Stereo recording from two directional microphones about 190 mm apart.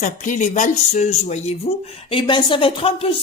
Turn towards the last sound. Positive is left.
turn(degrees=30)  # may be behind; listen again after turning